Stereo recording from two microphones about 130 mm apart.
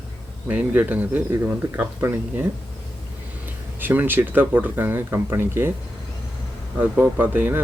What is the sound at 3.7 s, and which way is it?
Speech, 15° right (ahead or behind).